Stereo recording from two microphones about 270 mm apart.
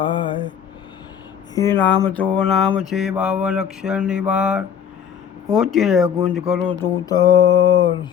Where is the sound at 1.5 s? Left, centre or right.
Centre.